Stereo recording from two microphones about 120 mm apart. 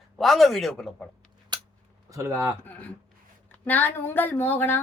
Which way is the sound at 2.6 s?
15° left (ahead or behind).